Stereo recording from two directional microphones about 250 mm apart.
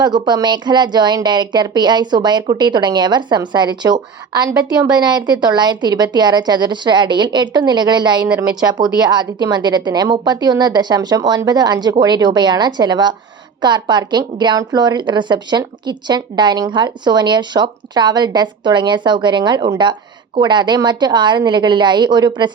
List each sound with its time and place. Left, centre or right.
0.0 s a woman's voice: centre